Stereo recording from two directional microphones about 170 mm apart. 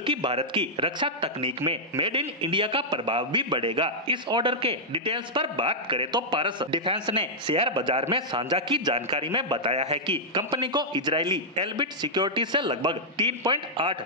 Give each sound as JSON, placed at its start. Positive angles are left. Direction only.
{"t": 0.0, "sound": "a man's voice", "side_deg": -30}